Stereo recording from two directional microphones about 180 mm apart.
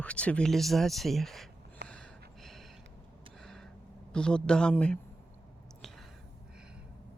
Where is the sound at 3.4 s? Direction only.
5° left (ahead or behind).